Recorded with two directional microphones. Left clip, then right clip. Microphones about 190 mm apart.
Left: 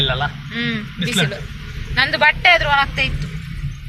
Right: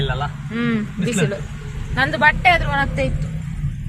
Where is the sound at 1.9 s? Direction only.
35° right (ahead or behind).